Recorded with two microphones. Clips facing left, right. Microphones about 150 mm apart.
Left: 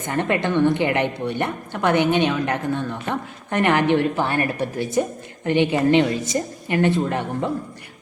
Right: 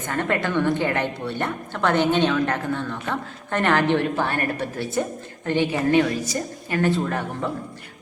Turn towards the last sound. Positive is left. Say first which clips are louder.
# left 3 dB
turn(degrees=20)  # may be behind; listen again after turning